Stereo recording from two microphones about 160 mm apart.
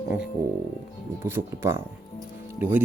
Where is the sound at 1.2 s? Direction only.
15° right (ahead or behind).